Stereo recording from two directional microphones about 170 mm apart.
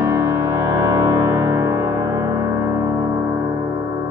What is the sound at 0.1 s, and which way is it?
Music, 15° right (ahead or behind).